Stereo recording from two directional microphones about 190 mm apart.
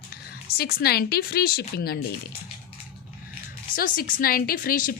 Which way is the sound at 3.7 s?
50° left (ahead or behind).